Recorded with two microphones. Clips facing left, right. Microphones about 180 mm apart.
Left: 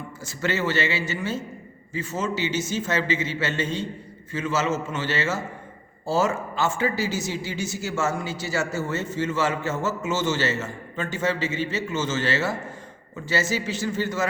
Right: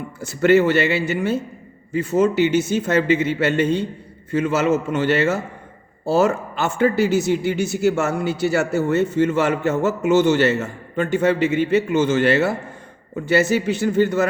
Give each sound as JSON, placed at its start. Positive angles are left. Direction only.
{"t": 0.2, "sound": "speech", "side_deg": -60}